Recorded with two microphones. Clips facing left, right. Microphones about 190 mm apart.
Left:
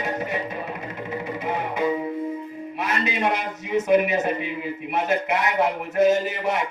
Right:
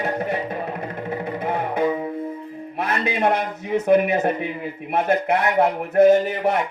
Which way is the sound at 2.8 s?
55° right (ahead or behind).